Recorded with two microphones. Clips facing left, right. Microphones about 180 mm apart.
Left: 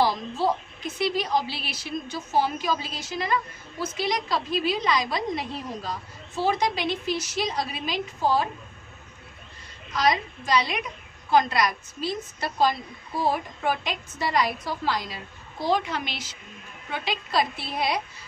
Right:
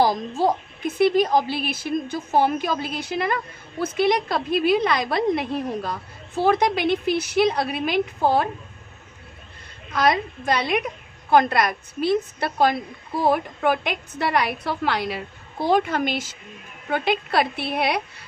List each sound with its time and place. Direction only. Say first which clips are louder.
0.0 s a woman's voice: right 4 dB; 45° right (ahead or behind)
9.8 s a woman's voice: right 3 dB; 55° right (ahead or behind)